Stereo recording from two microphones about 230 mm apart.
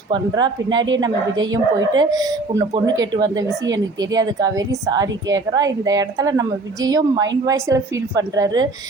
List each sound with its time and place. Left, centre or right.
0.1 s speech: centre